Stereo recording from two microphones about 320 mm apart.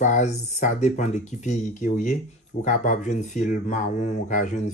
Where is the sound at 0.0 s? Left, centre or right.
Left.